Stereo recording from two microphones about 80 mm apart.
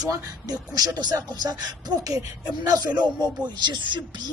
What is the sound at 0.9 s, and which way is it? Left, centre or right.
A man's voice, right.